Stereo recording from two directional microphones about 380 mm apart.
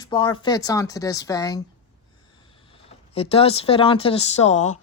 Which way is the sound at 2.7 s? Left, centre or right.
Centre.